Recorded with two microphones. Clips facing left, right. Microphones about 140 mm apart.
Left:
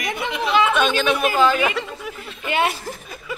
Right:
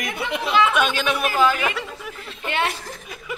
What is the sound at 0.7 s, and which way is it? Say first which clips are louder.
Speech: left 2 dB; 10° right (ahead or behind).